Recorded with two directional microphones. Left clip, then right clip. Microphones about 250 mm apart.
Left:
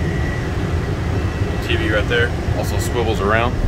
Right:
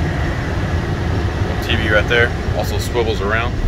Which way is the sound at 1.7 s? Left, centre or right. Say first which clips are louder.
Right 3 dB; centre.